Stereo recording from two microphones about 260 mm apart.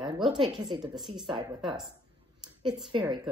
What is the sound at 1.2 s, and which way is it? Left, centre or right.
Speech, centre.